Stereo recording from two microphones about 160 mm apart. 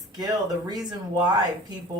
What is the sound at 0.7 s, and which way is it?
Speech, 25° right (ahead or behind).